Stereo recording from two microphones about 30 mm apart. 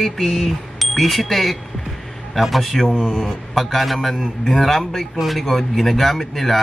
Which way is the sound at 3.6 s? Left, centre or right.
Centre.